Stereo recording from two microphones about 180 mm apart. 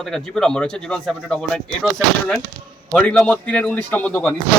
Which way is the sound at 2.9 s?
5° left (ahead or behind).